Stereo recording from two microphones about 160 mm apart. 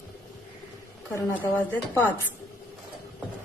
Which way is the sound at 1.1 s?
15° left (ahead or behind).